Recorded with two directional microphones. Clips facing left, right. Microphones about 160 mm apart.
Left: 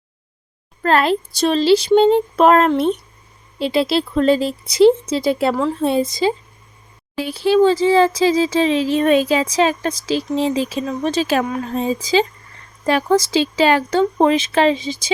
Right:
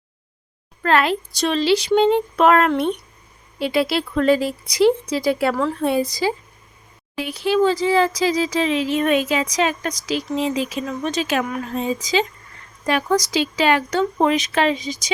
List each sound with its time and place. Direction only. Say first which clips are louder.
0.8 s speech: left 2 dB; 35° left (ahead or behind)